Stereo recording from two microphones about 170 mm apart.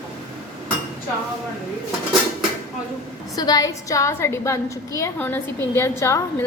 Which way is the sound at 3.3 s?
20° left (ahead or behind).